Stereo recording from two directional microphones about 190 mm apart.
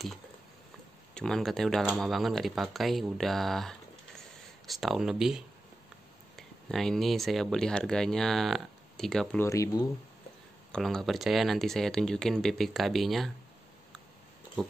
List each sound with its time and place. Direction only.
1.1 s speech: 5° left (ahead or behind)
9.4 s speech: 15° left (ahead or behind)
10.7 s speech: centre (ahead or behind)
14.6 s speech: centre (ahead or behind)